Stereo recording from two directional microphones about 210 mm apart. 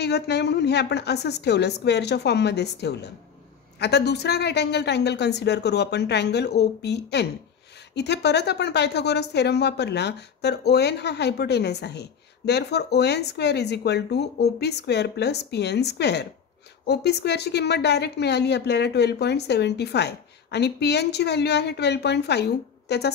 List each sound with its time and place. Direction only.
0.0 s a woman's voice: 55° left (ahead or behind)